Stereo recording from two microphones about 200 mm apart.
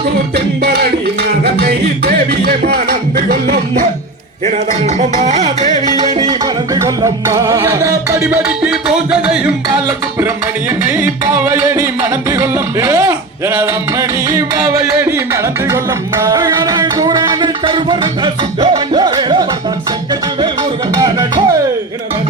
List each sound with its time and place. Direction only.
0.3 s music: 50° right (ahead or behind)
6.0 s music: 20° right (ahead or behind)
10.8 s music: 10° right (ahead or behind)
20.9 s music: 20° right (ahead or behind)